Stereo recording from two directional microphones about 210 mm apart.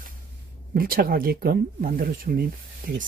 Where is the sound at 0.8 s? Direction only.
45° right (ahead or behind).